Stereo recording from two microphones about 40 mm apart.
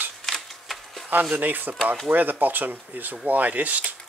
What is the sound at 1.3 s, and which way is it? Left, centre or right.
Speech, right.